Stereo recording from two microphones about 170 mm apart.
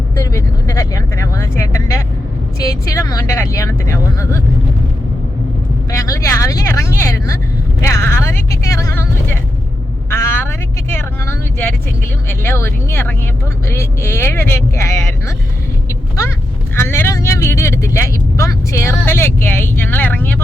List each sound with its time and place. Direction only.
0.2 s speech: 20° left (ahead or behind)
5.9 s speech: 20° left (ahead or behind)
10.1 s speech: 15° left (ahead or behind)
16.7 s speech: 15° left (ahead or behind)